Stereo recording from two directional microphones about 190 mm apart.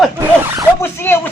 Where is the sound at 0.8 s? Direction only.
10° left (ahead or behind).